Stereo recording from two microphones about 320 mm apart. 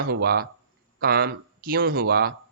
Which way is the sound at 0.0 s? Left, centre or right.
Right.